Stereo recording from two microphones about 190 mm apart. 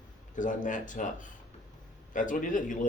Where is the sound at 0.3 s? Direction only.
40° left (ahead or behind).